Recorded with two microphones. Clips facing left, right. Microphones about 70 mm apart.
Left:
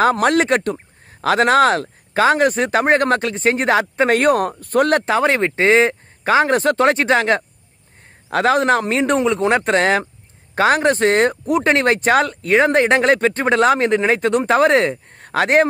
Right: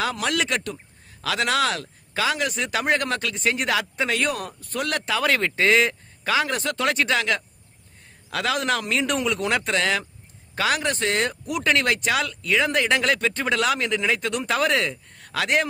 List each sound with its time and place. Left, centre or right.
0.0 s speech: left